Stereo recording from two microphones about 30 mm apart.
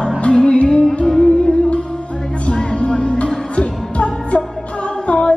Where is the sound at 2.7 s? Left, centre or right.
Left.